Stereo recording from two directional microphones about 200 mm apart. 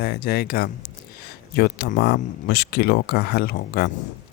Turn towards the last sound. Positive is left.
turn(degrees=50)  # may be behind; listen again after turning